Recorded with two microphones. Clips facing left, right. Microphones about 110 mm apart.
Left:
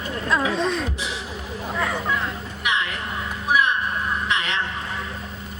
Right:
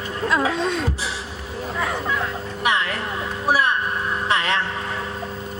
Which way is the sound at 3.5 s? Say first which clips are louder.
Right 1 dB; 35° right (ahead or behind).